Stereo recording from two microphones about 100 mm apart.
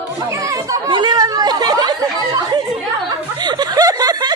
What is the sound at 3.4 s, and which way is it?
Snicker, 45° right (ahead or behind).